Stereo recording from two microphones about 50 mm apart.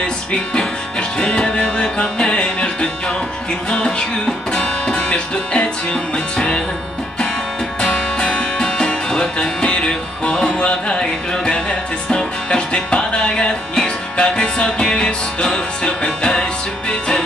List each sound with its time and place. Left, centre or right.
0.0 s music: centre
7.8 s music: centre